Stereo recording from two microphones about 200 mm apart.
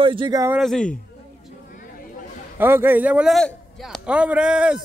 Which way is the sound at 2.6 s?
10° right (ahead or behind).